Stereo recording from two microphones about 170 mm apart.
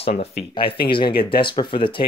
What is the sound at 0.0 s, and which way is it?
Speech, 35° left (ahead or behind).